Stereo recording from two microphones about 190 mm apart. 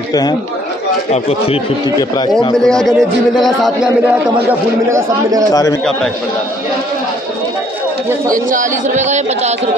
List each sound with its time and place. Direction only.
0.1 s speech: 20° left (ahead or behind)
2.0 s speech: 20° left (ahead or behind)
2.6 s speech: centre (ahead or behind)
4.5 s a man's voice: 15° right (ahead or behind)
5.5 s a man's voice: 20° left (ahead or behind)
8.3 s speech: 45° right (ahead or behind)